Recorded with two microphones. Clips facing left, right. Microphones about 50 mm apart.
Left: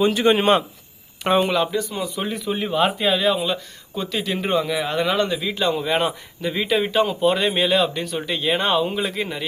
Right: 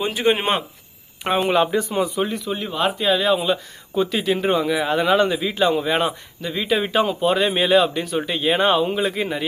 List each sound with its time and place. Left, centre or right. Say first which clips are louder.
0.0 s a man's voice: left 3 dB; centre
1.7 s speech: right 4 dB; right
2.1 s a man's voice: right 1 dB; centre
6.7 s a man's voice: right 1 dB; centre